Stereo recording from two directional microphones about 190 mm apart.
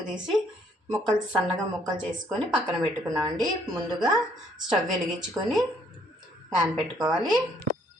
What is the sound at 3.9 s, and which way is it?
Speech, 5° right (ahead or behind).